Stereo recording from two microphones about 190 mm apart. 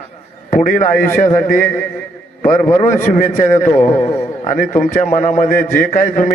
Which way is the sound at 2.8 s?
45° left (ahead or behind).